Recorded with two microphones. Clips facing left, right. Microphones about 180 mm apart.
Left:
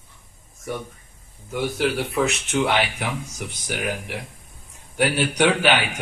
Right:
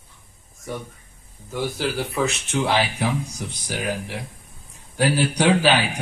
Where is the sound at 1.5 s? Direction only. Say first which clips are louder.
Left 2 dB; centre (ahead or behind).